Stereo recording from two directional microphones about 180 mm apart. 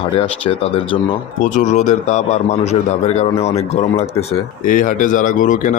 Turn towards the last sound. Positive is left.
turn(degrees=45)  # may be behind; listen again after turning